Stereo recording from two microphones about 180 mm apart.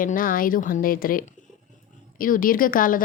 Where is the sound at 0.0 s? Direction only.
50° left (ahead or behind).